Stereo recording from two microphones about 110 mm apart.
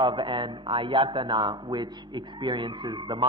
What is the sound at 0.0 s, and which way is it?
A man's voice, 45° right (ahead or behind).